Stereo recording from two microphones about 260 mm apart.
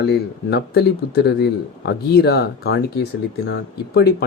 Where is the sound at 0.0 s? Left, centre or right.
Left.